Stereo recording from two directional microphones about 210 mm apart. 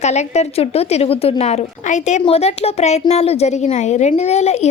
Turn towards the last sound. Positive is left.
turn(degrees=30)  # may be behind; listen again after turning